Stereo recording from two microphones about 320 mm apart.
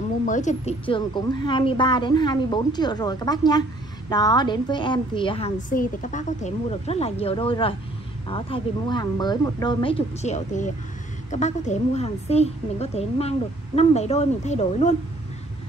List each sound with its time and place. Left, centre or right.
0.2 s a woman's voice: left